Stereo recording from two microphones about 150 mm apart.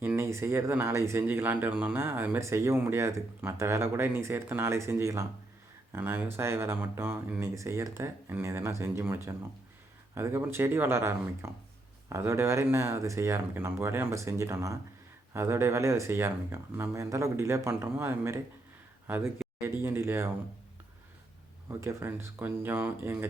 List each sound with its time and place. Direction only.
0.0 s speech: 15° right (ahead or behind)
21.7 s speech: 20° right (ahead or behind)